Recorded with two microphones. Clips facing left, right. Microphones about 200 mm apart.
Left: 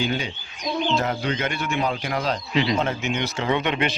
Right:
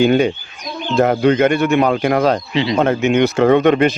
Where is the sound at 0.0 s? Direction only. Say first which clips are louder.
Right 13 dB; 55° right (ahead or behind).